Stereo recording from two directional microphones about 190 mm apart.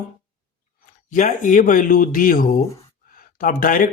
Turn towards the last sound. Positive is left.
turn(degrees=45)  # may be behind; listen again after turning